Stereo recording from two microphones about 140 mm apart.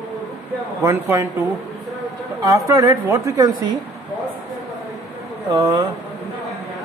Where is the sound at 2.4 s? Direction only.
25° right (ahead or behind).